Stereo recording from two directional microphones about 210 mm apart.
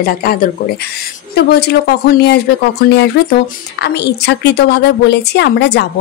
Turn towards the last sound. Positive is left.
turn(degrees=55)  # may be behind; listen again after turning